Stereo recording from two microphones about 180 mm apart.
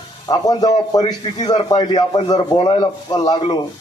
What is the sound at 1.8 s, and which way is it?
A man's voice, 25° left (ahead or behind).